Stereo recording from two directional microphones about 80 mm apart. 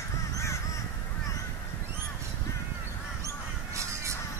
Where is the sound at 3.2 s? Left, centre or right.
Right.